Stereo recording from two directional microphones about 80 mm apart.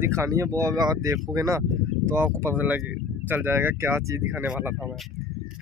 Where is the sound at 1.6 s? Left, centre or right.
Right.